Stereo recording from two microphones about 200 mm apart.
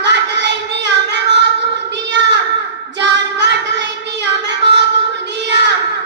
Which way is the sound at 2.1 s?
60° right (ahead or behind).